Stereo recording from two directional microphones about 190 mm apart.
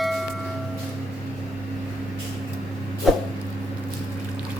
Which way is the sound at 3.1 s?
Centre (ahead or behind).